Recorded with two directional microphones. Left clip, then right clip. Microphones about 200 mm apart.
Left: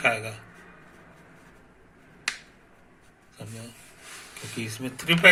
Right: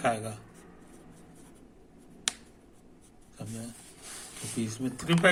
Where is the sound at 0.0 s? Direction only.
20° right (ahead or behind).